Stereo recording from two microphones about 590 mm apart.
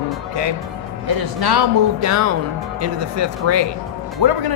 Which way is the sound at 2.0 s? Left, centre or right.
Right.